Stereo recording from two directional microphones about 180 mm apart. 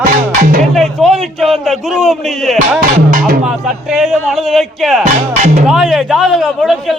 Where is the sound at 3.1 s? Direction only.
50° right (ahead or behind).